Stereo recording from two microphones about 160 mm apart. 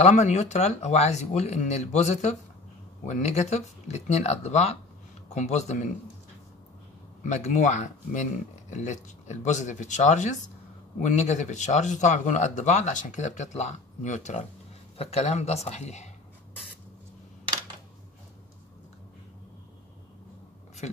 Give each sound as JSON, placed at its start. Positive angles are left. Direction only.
{"t": 0.0, "sound": "speech", "side_deg": 45}
{"t": 7.2, "sound": "speech", "side_deg": 45}
{"t": 20.8, "sound": "a sound", "side_deg": 45}